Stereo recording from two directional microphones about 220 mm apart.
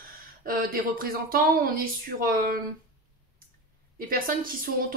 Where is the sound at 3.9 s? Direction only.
40° right (ahead or behind).